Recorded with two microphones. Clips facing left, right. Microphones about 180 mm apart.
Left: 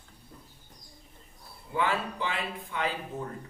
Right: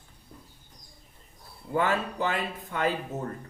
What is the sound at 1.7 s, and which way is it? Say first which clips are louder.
Speech: right 3 dB; 45° right (ahead or behind).